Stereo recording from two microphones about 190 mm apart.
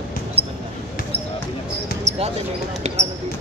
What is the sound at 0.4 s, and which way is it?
Basketball bounce, 30° right (ahead or behind).